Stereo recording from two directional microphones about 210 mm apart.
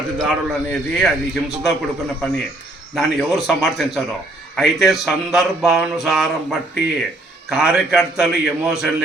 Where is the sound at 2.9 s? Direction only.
Centre (ahead or behind).